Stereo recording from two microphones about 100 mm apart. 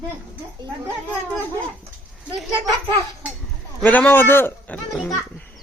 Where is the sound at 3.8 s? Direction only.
15° left (ahead or behind).